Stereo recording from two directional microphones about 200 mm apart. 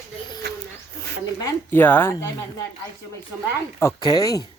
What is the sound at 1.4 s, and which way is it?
Speech, 15° left (ahead or behind).